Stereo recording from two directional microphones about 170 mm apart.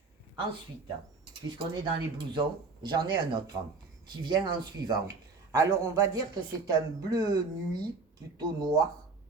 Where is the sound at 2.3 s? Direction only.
25° right (ahead or behind).